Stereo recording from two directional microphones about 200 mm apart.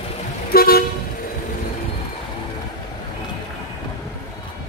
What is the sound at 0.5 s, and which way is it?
Toot, 50° left (ahead or behind).